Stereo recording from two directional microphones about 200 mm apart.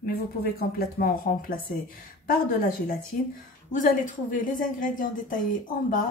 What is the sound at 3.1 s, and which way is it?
Speech, 40° left (ahead or behind).